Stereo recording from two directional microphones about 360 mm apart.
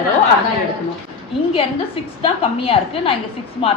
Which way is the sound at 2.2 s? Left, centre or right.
Centre.